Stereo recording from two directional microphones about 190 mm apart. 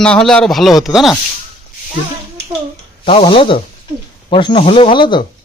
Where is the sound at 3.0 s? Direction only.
30° left (ahead or behind).